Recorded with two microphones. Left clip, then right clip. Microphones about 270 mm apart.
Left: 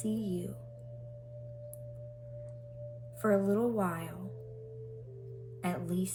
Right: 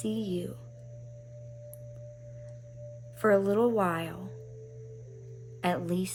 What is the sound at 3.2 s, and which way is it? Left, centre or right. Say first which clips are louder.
Speech: right 5 dB; centre.